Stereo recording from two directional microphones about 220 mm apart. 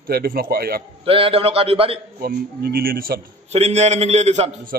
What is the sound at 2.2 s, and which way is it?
Speech, 45° right (ahead or behind).